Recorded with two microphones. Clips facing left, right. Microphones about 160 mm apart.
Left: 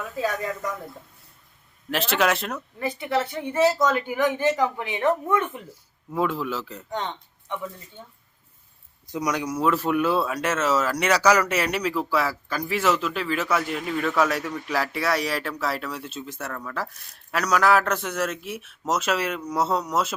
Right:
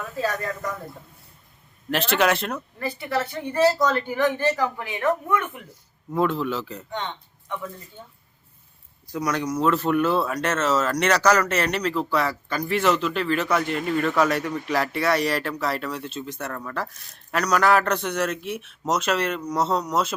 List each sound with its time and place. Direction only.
0.3 s speech: 10° left (ahead or behind)
1.9 s speech: centre (ahead or behind)
2.7 s a woman's voice: 20° left (ahead or behind)
3.8 s speech: 5° left (ahead or behind); by 5.5 s 25° left (ahead or behind)
6.1 s speech: 5° left (ahead or behind)
9.0 s speech: 15° left (ahead or behind)